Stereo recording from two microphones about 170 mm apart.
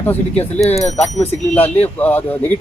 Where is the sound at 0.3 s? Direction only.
40° left (ahead or behind).